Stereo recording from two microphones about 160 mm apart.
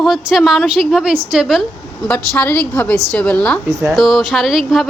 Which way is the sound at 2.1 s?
10° left (ahead or behind).